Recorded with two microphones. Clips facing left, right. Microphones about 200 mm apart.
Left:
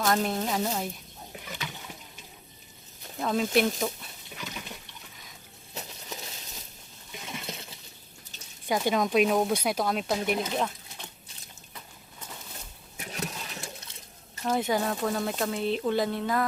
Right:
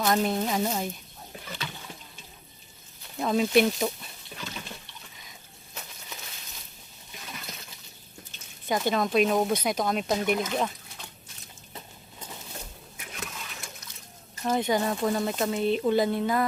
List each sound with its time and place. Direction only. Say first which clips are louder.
0.0 s speech: right 2 dB; centre (ahead or behind)
1.5 s boat: right 1 dB; 15° left (ahead or behind)
3.2 s speech: right 3 dB; 5° right (ahead or behind)
4.4 s water: even; 15° left (ahead or behind)
7.2 s water: left 4 dB; 25° left (ahead or behind)
8.6 s speech: even; 10° left (ahead or behind)
13.0 s a sound: left 5 dB; 35° left (ahead or behind)
14.4 s speech: right 1 dB; centre (ahead or behind)